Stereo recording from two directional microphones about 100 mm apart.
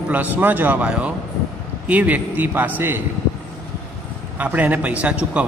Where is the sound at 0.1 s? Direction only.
15° right (ahead or behind).